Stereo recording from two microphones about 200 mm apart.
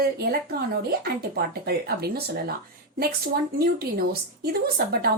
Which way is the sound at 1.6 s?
50° right (ahead or behind).